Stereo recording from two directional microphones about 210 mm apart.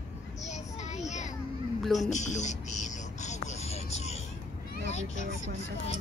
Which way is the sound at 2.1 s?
35° left (ahead or behind).